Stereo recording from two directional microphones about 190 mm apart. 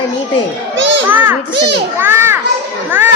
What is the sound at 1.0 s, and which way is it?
A woman's voice, 10° right (ahead or behind).